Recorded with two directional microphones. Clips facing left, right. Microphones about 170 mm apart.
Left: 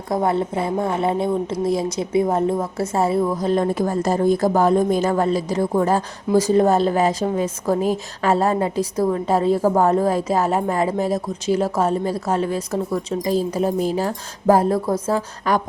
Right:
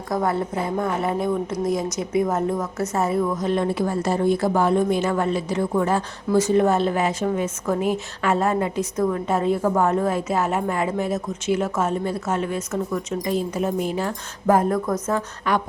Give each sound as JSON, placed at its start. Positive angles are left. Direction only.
{"t": 0.1, "sound": "a woman's voice", "side_deg": 25}